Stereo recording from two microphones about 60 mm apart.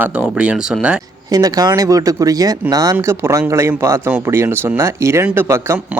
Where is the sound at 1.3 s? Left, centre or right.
Right.